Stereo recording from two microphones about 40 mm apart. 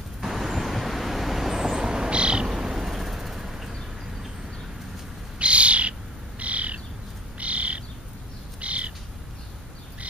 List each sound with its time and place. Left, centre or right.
0.2 s vehicle: centre; by 2.5 s right
2.5 s vehicle: centre
5.4 s bird: right
8.5 s crow: right